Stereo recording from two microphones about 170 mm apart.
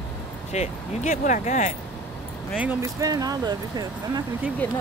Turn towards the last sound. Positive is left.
turn(degrees=10)  # may be behind; listen again after turning